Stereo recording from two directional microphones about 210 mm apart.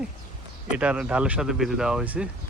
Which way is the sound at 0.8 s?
5° right (ahead or behind).